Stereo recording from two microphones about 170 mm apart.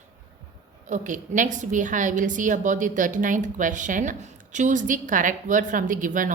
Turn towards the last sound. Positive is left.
turn(degrees=-50)  # may be behind; listen again after turning